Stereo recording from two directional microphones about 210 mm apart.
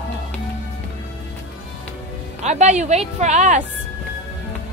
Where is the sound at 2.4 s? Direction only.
35° right (ahead or behind).